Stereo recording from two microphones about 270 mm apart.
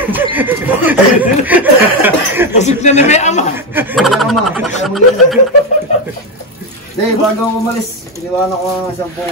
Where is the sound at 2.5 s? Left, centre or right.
Left.